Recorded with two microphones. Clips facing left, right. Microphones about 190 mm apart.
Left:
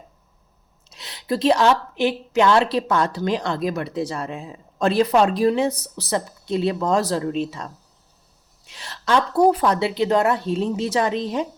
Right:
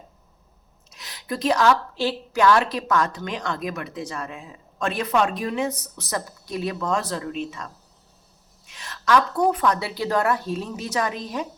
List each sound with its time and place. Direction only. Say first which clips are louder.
0.9 s a woman's voice: left 6 dB; 30° left (ahead or behind)